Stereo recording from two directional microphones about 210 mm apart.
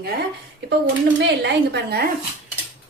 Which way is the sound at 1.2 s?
55° right (ahead or behind).